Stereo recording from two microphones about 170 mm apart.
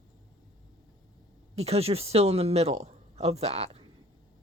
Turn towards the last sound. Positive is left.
turn(degrees=-40)  # may be behind; listen again after turning